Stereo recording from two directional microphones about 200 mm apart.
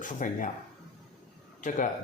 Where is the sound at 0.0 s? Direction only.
40° left (ahead or behind).